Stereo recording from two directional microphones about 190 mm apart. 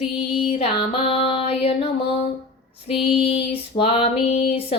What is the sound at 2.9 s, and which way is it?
Female singing, 30° left (ahead or behind).